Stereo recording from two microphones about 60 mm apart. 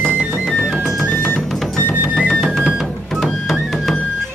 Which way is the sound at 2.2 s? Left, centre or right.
Centre.